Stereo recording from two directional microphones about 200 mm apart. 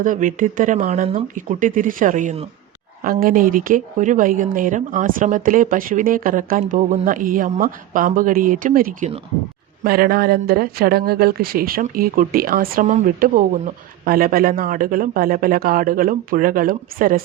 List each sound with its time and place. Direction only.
0.0 s speech: 40° right (ahead or behind)
9.8 s speech: 50° right (ahead or behind)